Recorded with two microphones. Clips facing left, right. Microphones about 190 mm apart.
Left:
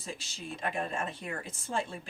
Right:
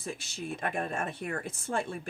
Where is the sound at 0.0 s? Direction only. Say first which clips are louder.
Right 4 dB; 60° right (ahead or behind).